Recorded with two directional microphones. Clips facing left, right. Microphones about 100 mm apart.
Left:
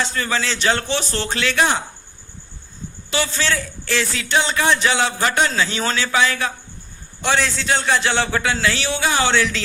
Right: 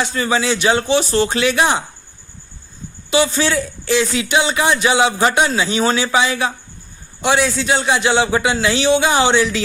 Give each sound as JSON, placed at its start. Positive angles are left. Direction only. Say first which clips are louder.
{"t": 0.0, "sound": "a man's voice", "louder": "right 4 dB", "side_deg": -15}
{"t": 3.1, "sound": "a man's voice", "louder": "right 6 dB", "side_deg": -15}